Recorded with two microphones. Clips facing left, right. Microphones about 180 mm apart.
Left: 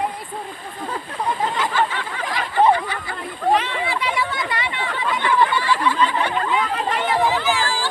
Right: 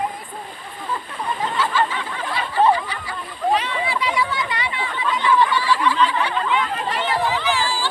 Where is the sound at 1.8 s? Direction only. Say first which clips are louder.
Even; 70° left (ahead or behind).